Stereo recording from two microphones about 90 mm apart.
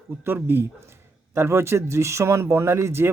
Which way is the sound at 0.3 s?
25° right (ahead or behind).